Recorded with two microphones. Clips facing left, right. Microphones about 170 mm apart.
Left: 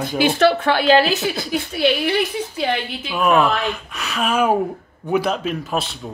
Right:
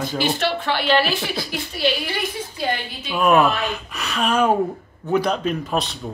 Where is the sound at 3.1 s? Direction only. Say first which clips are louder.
Even; centre (ahead or behind).